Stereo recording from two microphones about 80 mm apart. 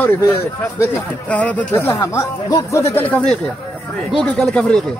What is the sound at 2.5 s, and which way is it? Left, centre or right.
Speech, left.